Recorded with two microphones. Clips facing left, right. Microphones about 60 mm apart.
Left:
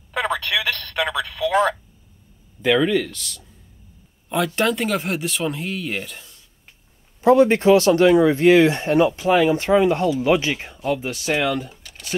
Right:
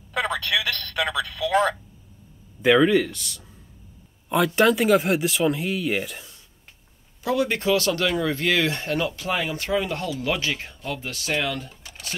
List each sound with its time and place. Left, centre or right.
0.1 s telephone: left
0.7 s speech: centre
2.6 s speech: centre
7.2 s speech: left